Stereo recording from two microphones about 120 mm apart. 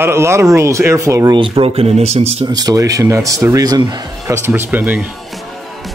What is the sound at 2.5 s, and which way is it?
Speech, 35° right (ahead or behind).